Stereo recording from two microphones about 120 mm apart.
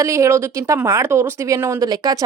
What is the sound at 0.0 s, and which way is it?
Speech, 25° right (ahead or behind).